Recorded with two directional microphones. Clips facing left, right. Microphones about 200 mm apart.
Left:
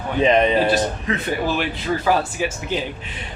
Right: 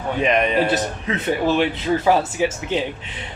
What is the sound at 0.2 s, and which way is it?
Speech, 30° left (ahead or behind).